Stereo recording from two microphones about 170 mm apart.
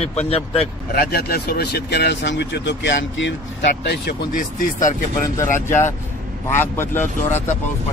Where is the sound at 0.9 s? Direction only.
65° left (ahead or behind); by 3.3 s 90° left.